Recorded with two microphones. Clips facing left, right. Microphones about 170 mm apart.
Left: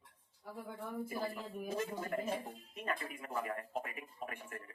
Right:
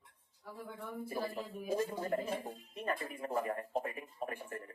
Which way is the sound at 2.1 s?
35° right (ahead or behind).